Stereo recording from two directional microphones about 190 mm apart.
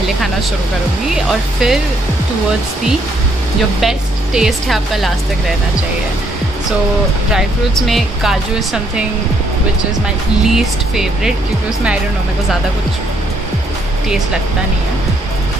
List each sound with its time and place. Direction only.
1.1 s speech: centre (ahead or behind)
3.8 s speech: centre (ahead or behind)
7.3 s speech: centre (ahead or behind)
10.4 s speech: centre (ahead or behind)